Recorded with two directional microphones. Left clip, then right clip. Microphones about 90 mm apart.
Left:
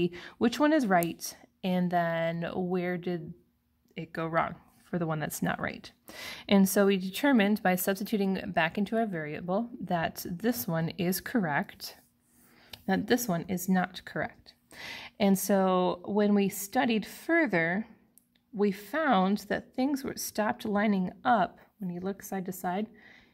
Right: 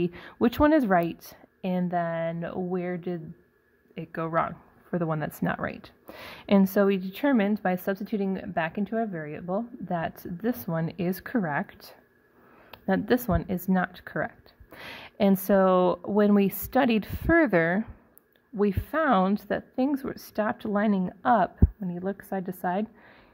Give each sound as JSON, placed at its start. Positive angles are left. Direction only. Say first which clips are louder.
{"t": 0.0, "sound": "speech", "louder": "right 3 dB", "side_deg": -5}
{"t": 1.6, "sound": "speech", "louder": "right 1 dB", "side_deg": 5}
{"t": 12.7, "sound": "a woman's voice", "louder": "right 3 dB", "side_deg": -20}
{"t": 16.5, "sound": "a woman's voice", "louder": "right 4 dB", "side_deg": -30}